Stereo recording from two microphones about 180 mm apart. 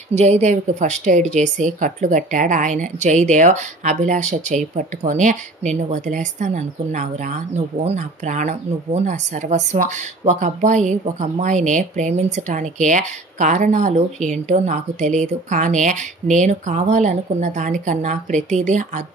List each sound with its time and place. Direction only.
0.1 s a woman's voice: 40° right (ahead or behind)